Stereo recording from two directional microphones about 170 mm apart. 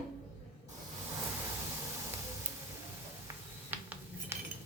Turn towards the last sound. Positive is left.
turn(degrees=-10)  # may be behind; listen again after turning